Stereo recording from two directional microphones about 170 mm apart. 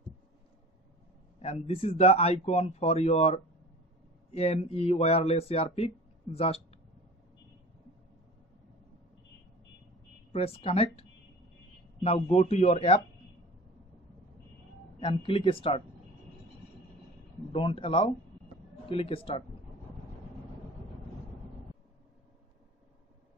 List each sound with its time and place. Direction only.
1.4 s speech: 35° left (ahead or behind)
10.3 s speech: 35° left (ahead or behind)
15.0 s speech: 30° left (ahead or behind)
17.5 s speech: 30° left (ahead or behind)